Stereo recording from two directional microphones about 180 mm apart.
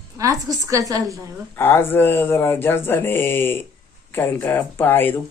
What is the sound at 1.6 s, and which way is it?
Speech, 10° left (ahead or behind).